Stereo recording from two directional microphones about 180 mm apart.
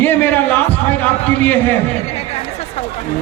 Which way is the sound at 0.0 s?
10° left (ahead or behind).